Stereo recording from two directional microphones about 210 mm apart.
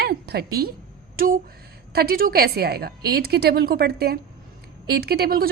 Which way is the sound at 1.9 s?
45° right (ahead or behind).